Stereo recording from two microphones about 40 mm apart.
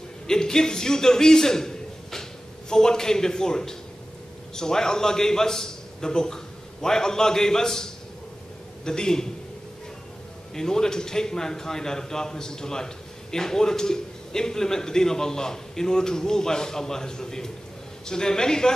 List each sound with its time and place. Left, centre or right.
0.3 s a man's voice: centre
10.5 s a man's voice: centre